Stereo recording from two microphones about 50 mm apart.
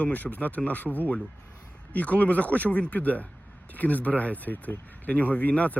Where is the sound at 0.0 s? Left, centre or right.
Left.